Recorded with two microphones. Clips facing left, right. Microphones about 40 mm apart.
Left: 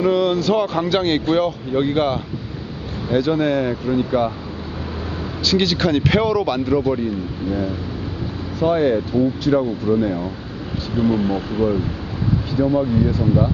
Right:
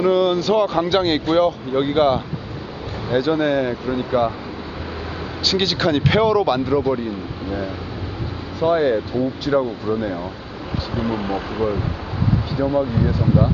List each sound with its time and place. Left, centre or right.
0.0 s speech: centre
5.5 s speech: centre
8.6 s speech: centre
10.9 s speech: right